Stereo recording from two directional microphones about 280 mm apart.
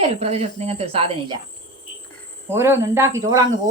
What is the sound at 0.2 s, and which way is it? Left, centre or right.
Speech, right.